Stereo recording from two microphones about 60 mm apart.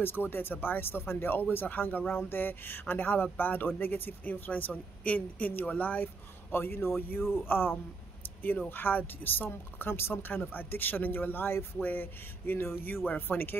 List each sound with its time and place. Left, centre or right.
0.0 s speech: left
6.5 s speech: left